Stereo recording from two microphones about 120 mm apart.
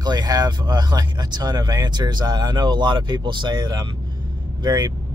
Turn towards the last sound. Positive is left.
turn(degrees=-35)  # may be behind; listen again after turning